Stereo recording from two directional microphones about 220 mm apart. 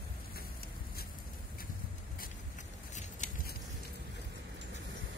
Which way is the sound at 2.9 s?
35° left (ahead or behind).